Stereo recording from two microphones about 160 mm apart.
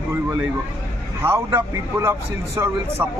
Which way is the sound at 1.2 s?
15° right (ahead or behind).